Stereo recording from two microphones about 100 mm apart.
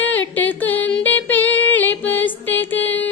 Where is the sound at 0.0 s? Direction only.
20° left (ahead or behind).